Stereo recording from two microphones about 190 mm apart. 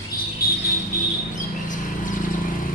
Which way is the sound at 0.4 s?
50° left (ahead or behind).